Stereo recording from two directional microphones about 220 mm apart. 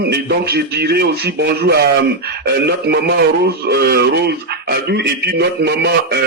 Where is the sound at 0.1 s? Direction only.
45° right (ahead or behind).